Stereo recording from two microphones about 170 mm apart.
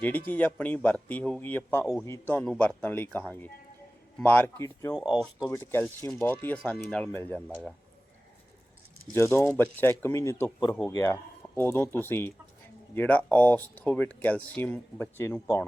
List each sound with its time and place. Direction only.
0.3 s speech: 10° left (ahead or behind)
5.1 s speech: centre (ahead or behind)
5.5 s speech: 10° left (ahead or behind)
9.1 s speech: 15° left (ahead or behind)